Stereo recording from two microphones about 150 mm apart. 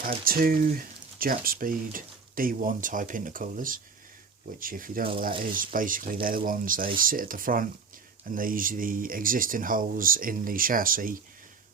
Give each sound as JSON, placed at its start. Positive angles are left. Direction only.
{"t": 0.3, "sound": "speech", "side_deg": -75}